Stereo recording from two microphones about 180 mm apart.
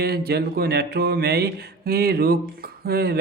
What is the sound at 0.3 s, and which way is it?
Speech, 60° right (ahead or behind).